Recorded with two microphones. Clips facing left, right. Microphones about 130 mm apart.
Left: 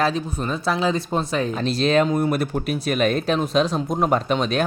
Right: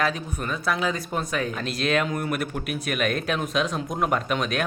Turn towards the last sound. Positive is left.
turn(degrees=30)  # may be behind; listen again after turning